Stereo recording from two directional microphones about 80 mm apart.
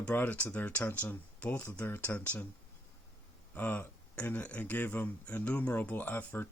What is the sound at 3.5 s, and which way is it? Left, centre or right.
Speech, left.